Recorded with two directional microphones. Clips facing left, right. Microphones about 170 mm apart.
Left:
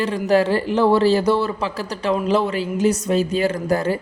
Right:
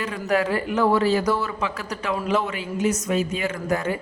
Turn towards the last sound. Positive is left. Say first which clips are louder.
# left 4 dB
turn(degrees=35)  # may be behind; listen again after turning